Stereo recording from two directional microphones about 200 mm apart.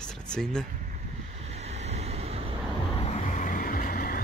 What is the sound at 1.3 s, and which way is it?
Vehicle, 35° right (ahead or behind).